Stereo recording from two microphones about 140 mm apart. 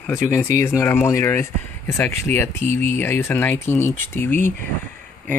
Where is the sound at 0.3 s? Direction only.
20° left (ahead or behind).